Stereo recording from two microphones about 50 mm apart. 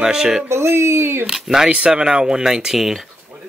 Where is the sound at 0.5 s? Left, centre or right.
Right.